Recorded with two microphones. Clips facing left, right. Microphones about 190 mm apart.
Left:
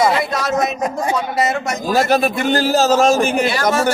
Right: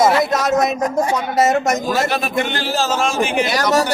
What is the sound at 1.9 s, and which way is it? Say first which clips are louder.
A man's voice: left 3 dB; 40° left (ahead or behind).